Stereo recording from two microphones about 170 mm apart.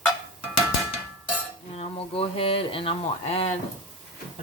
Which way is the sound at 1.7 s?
35° left (ahead or behind).